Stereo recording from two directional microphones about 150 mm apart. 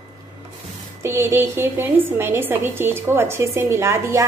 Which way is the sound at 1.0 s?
20° right (ahead or behind).